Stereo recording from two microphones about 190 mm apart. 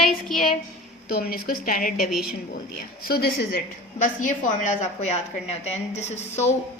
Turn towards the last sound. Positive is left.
turn(degrees=35)  # may be behind; listen again after turning